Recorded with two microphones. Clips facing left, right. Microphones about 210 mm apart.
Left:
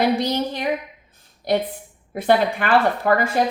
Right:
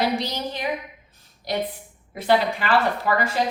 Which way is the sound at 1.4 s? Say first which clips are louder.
Left 7 dB; 55° left (ahead or behind).